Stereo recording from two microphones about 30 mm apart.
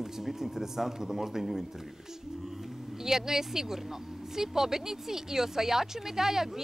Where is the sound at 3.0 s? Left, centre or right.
Centre.